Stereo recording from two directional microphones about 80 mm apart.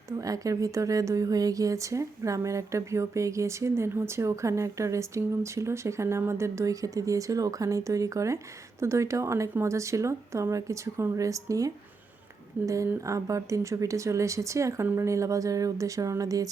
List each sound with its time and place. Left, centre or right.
0.2 s speech: right